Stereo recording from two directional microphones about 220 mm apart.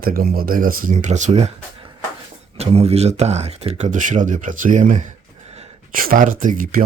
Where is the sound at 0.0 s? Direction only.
40° right (ahead or behind).